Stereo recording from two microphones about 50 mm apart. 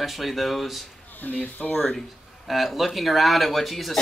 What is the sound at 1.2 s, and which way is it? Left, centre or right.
Speech, left.